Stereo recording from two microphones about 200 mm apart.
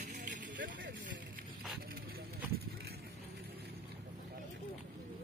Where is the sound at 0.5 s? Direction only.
65° right (ahead or behind).